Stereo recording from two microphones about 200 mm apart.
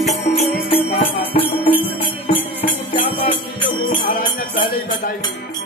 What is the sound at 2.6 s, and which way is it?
Music, 30° left (ahead or behind).